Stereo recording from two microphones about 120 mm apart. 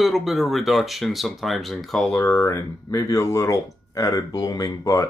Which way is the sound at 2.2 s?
20° left (ahead or behind).